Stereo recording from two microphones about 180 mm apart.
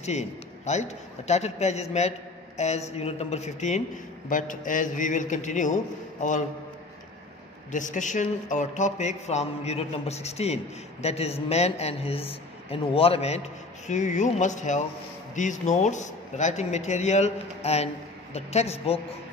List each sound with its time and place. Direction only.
0.0 s a man's voice: 40° left (ahead or behind)
7.7 s a man's voice: 45° left (ahead or behind)